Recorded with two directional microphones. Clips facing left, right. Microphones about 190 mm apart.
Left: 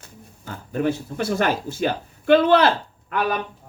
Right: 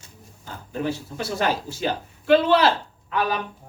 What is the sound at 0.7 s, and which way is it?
Speech, 50° left (ahead or behind).